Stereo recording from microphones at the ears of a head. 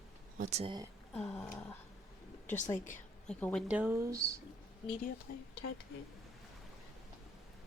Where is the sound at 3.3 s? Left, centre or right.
Centre.